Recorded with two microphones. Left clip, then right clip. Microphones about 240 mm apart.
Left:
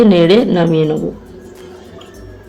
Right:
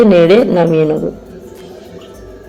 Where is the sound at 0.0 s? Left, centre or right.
Centre.